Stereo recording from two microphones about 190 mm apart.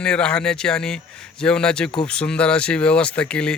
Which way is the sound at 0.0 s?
5° left (ahead or behind).